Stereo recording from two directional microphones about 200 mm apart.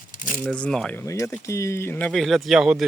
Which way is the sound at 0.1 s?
40° left (ahead or behind).